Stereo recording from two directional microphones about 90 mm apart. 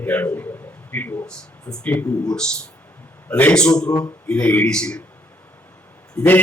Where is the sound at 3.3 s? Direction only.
15° left (ahead or behind).